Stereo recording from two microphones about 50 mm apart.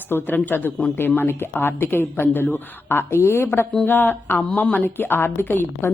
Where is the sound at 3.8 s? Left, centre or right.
Left.